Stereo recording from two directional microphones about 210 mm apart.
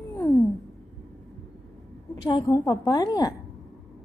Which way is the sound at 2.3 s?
15° left (ahead or behind).